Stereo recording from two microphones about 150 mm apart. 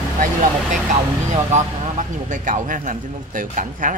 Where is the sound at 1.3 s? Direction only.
55° right (ahead or behind).